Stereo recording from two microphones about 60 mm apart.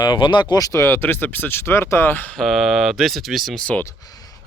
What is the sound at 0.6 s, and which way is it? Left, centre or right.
Speech, left.